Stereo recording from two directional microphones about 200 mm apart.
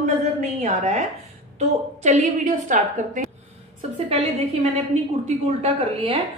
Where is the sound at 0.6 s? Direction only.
35° right (ahead or behind).